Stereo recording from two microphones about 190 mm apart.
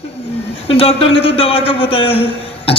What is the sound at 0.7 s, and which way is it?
A man's voice, 30° left (ahead or behind).